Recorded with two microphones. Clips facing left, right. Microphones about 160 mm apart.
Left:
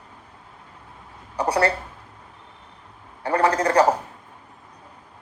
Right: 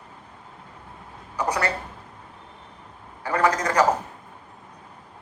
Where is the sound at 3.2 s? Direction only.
30° left (ahead or behind).